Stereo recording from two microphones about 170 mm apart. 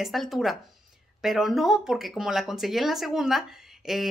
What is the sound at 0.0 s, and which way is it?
A woman's voice, centre (ahead or behind).